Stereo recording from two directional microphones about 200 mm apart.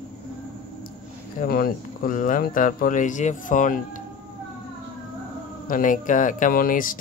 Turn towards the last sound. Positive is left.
turn(degrees=45)  # may be behind; listen again after turning